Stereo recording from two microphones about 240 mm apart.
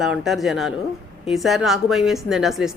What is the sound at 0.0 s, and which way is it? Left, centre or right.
A woman's voice, centre.